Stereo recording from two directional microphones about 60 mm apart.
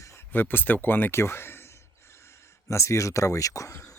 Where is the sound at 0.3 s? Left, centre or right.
Left.